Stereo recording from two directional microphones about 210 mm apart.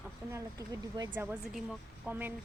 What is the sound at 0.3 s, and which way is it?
Speech, 15° right (ahead or behind).